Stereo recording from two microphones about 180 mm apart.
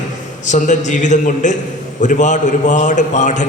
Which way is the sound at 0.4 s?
40° left (ahead or behind).